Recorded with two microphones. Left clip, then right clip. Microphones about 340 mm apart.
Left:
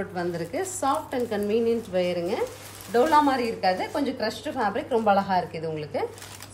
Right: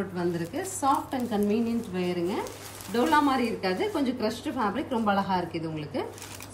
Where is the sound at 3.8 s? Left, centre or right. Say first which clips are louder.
Left 1 dB; left.